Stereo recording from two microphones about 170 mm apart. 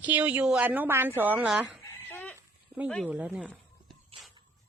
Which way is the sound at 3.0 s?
10° right (ahead or behind).